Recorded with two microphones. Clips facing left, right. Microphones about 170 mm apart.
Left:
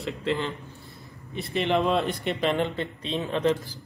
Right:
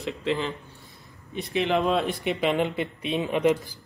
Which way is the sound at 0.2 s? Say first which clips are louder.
Right 1 dB; centre (ahead or behind).